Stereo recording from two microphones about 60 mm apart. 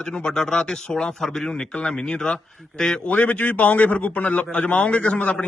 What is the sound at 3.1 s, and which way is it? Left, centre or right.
A man's voice, left.